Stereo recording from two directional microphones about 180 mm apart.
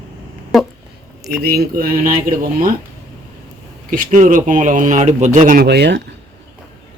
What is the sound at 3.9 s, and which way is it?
Speech, 50° right (ahead or behind).